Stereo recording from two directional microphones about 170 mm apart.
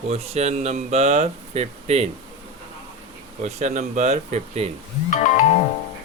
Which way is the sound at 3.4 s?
40° right (ahead or behind).